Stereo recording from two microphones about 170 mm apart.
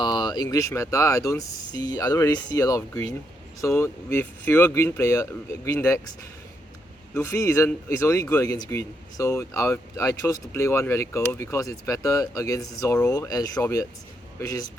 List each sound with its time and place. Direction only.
0.0 s speech: 25° left (ahead or behind)
7.2 s speech: 15° left (ahead or behind)